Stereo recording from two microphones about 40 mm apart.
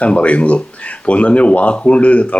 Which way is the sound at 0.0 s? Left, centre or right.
Left.